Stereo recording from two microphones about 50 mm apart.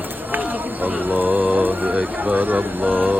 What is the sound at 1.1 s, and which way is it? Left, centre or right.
Speech, right.